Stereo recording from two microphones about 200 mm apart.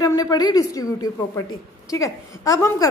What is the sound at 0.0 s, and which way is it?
A woman's voice, 15° left (ahead or behind).